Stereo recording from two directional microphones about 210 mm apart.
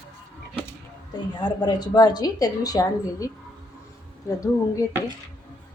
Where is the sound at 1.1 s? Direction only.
20° left (ahead or behind).